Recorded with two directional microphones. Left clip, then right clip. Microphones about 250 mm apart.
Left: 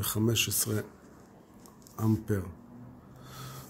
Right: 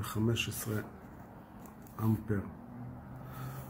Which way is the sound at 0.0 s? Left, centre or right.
Left.